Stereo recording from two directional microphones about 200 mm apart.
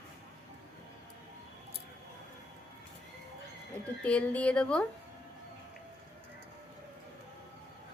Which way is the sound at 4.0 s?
5° left (ahead or behind).